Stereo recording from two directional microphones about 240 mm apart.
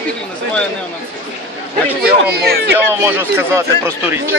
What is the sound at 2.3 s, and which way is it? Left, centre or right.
Speech, right.